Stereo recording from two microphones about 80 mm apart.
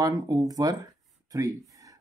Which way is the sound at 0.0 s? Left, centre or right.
Right.